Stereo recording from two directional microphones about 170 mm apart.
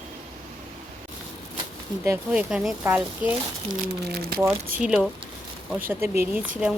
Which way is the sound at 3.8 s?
60° right (ahead or behind).